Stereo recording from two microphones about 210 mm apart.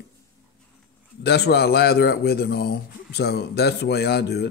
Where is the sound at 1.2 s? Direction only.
50° left (ahead or behind).